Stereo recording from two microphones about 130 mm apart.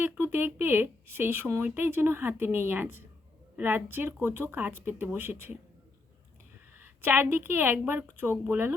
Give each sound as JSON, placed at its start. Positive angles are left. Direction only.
{"t": 0.0, "sound": "speech", "side_deg": -15}
{"t": 6.7, "sound": "speech", "side_deg": -15}